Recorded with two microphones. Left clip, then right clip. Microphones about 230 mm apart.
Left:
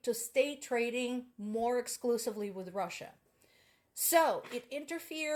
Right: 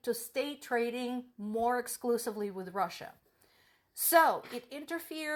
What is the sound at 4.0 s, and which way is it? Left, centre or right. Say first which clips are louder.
Speech: right 3 dB; right.